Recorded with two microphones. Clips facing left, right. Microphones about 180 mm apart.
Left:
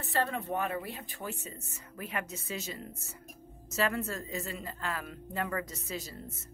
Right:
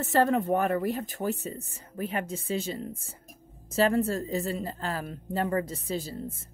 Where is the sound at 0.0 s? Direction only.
45° right (ahead or behind).